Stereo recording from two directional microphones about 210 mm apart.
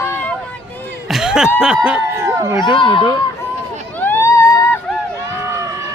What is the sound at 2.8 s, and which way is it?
Speech, 25° left (ahead or behind).